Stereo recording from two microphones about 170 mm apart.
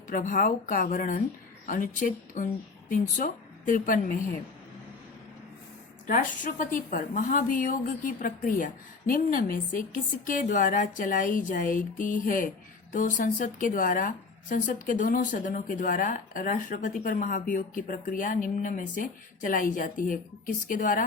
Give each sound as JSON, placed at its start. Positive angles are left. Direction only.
{"t": 0.1, "sound": "a woman's voice", "side_deg": 55}
{"t": 6.1, "sound": "a woman's voice", "side_deg": 50}